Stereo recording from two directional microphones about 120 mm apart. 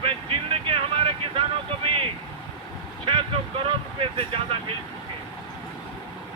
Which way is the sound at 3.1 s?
50° right (ahead or behind).